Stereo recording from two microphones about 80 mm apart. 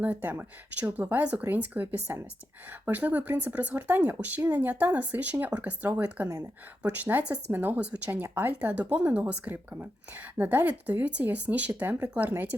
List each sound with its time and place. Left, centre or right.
0.0 s speech: right
6.2 s speech: right
6.8 s speech: centre